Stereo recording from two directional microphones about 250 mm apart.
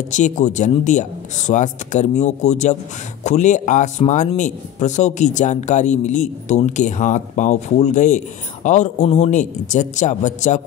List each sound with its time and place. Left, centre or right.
0.1 s a man's voice: left